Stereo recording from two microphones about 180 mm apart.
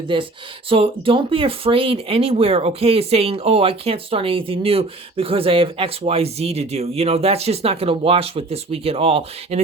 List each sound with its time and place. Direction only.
0.1 s speech: 25° right (ahead or behind)